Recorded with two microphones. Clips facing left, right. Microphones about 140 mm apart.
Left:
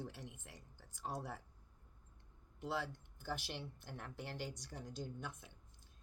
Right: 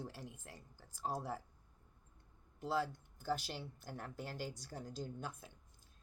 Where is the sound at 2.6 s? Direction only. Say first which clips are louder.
Right 4 dB; 35° right (ahead or behind).